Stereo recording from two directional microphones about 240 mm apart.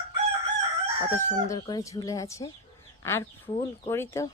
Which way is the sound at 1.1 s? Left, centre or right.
Centre.